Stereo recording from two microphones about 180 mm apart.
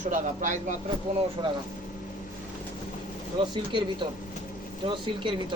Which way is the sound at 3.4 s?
25° right (ahead or behind).